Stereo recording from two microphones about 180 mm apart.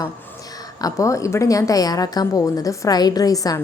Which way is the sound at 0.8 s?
20° left (ahead or behind).